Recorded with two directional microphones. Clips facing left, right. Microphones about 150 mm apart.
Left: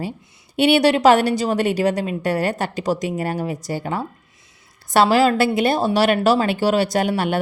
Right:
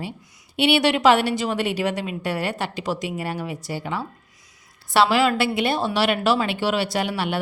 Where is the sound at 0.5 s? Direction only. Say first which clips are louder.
Left 4 dB; 45° left (ahead or behind).